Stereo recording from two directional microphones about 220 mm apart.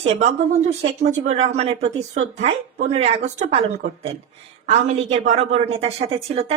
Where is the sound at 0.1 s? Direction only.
30° right (ahead or behind).